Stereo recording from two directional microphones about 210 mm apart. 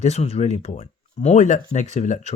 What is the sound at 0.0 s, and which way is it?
Speech, 30° left (ahead or behind).